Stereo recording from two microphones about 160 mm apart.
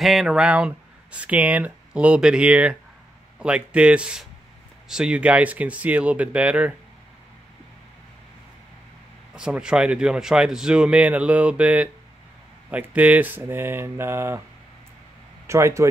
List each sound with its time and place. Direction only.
0.0 s speech: centre (ahead or behind)
9.3 s speech: 5° right (ahead or behind)
15.4 s speech: 15° right (ahead or behind)